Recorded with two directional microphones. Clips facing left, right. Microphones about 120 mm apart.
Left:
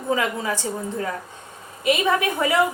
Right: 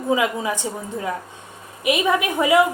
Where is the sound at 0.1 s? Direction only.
15° right (ahead or behind).